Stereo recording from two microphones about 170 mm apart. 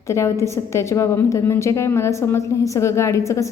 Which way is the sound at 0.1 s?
15° left (ahead or behind).